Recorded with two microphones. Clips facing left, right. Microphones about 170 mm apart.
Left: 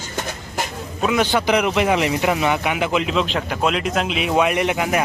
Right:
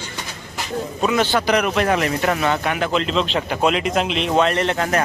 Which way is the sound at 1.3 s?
15° left (ahead or behind).